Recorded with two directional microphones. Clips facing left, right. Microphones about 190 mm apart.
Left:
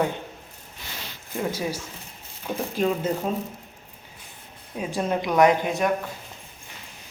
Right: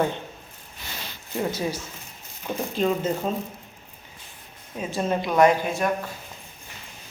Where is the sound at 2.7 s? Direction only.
10° left (ahead or behind).